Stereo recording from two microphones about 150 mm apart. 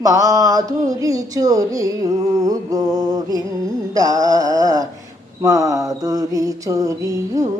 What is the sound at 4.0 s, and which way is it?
Mantra, 25° right (ahead or behind).